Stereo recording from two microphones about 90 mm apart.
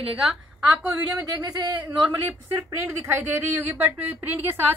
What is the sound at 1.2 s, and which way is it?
A woman's voice, 45° right (ahead or behind).